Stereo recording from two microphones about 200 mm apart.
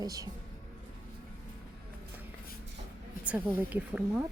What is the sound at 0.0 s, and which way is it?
Speech, 15° right (ahead or behind).